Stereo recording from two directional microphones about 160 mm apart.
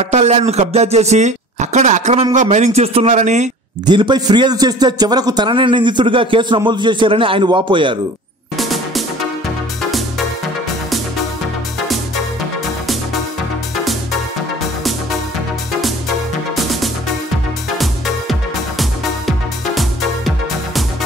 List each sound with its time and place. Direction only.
0.0 s speech: 40° right (ahead or behind)
3.8 s a man's voice: 30° right (ahead or behind)
8.5 s music: centre (ahead or behind)
18.8 s music: centre (ahead or behind)